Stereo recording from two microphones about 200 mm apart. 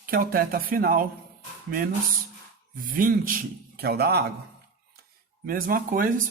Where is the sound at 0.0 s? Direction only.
45° right (ahead or behind).